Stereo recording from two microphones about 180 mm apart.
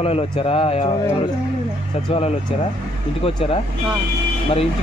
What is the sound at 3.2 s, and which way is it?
Speech, 35° left (ahead or behind).